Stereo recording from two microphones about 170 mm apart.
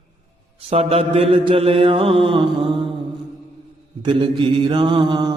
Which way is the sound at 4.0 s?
30° right (ahead or behind).